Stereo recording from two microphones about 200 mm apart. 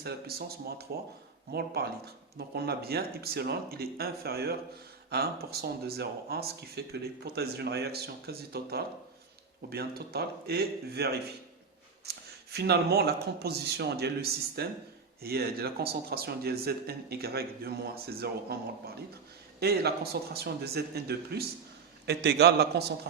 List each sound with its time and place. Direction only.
0.0 s a man's voice: 50° right (ahead or behind)